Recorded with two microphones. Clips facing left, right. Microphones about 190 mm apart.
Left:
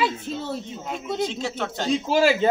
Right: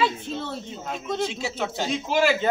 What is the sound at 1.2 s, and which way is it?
Speech, 10° right (ahead or behind).